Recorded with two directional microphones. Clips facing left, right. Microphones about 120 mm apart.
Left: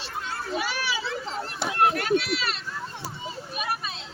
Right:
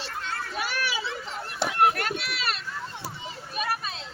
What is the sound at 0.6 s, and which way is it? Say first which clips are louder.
Speech: even; 50° right (ahead or behind).